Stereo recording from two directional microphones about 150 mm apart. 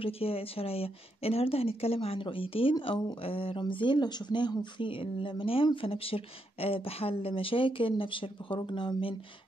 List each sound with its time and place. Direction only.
0.0 s speech: 40° left (ahead or behind)